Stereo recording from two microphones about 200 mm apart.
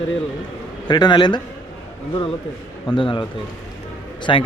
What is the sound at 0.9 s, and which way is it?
Speech, 20° left (ahead or behind).